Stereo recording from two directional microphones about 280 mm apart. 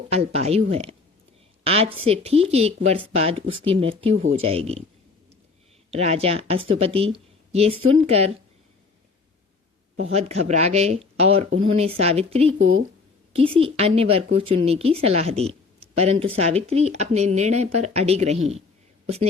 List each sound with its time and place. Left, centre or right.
0.1 s a woman's voice: right
5.9 s speech: right
10.1 s speech: right
12.5 s speech: right
13.3 s a woman's voice: centre